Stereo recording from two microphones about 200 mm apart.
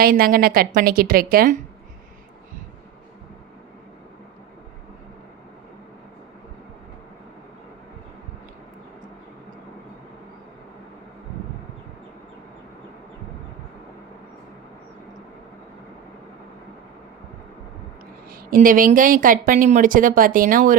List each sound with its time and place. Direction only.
0.0 s speech: 50° right (ahead or behind)
18.3 s speech: 45° right (ahead or behind)